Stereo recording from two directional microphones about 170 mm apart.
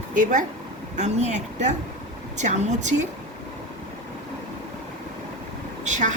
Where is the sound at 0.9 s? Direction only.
45° right (ahead or behind).